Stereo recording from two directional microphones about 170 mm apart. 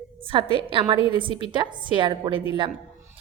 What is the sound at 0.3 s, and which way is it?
A woman's voice, 30° right (ahead or behind).